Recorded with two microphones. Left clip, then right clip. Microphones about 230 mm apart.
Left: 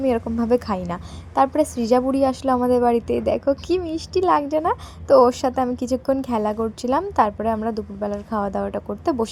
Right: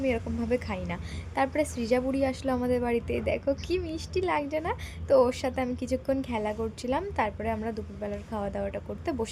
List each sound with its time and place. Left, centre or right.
0.0 s a woman's voice: left